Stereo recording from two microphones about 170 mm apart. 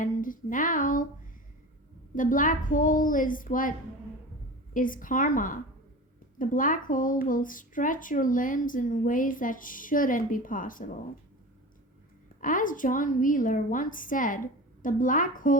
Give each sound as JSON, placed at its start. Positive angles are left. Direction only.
{"t": 0.0, "sound": "a sound", "side_deg": 50}
{"t": 2.1, "sound": "speech", "side_deg": 50}
{"t": 12.4, "sound": "speech", "side_deg": 50}